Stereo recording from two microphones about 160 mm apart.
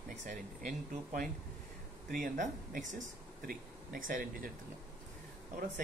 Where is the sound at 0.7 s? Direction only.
55° right (ahead or behind).